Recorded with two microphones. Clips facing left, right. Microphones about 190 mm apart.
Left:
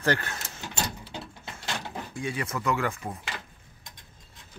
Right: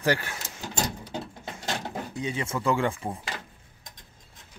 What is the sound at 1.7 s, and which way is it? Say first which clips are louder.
Speech: right 3 dB; 20° right (ahead or behind).